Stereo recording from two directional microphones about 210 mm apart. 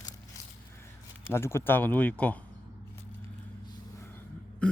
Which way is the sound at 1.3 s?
10° left (ahead or behind).